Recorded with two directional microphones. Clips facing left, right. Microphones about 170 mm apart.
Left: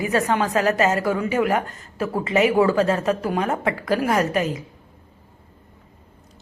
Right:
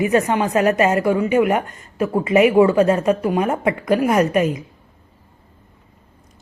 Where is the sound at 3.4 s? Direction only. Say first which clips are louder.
Right 4 dB; 20° right (ahead or behind).